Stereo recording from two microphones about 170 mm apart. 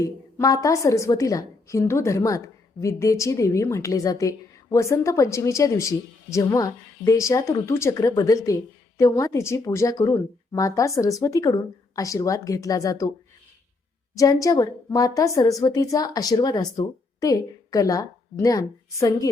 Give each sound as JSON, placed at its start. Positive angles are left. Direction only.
{"t": 0.0, "sound": "a woman's voice", "side_deg": 20}
{"t": 14.2, "sound": "a woman's voice", "side_deg": 20}